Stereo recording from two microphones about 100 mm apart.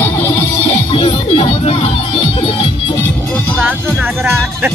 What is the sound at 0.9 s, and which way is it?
Music, 70° left (ahead or behind).